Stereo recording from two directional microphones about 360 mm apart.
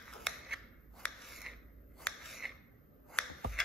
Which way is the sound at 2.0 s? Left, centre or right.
Centre.